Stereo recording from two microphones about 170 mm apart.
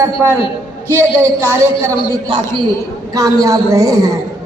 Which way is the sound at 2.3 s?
25° right (ahead or behind).